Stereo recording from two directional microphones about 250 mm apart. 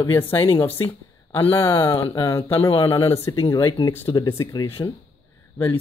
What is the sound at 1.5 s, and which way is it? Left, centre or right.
Speech, centre.